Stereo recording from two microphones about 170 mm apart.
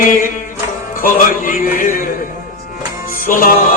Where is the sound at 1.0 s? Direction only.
55° left (ahead or behind).